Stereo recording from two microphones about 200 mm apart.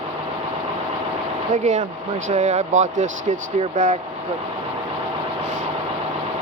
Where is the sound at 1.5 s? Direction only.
35° right (ahead or behind).